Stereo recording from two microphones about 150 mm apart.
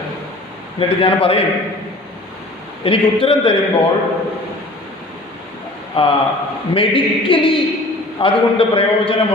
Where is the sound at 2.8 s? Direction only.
35° left (ahead or behind).